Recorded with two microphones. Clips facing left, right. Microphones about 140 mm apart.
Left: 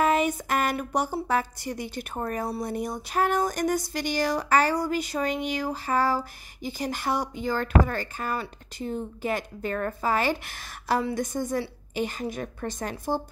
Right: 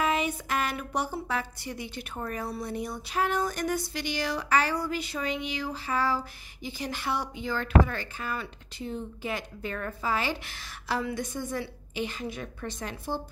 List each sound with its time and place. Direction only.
0.0 s a woman's voice: 45° left (ahead or behind)